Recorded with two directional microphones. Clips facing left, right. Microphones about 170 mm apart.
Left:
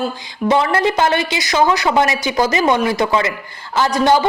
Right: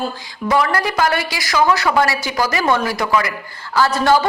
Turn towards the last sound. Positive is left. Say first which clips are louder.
# left 1 dB
turn(degrees=20)  # may be behind; listen again after turning